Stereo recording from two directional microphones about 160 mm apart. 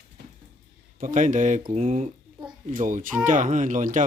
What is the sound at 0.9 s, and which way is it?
Speech, 55° right (ahead or behind).